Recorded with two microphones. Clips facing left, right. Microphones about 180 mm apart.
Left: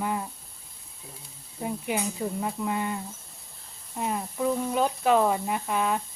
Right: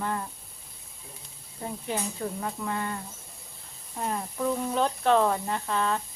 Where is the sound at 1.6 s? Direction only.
10° left (ahead or behind).